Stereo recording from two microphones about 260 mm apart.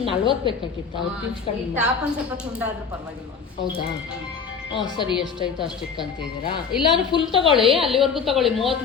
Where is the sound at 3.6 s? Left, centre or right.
Left.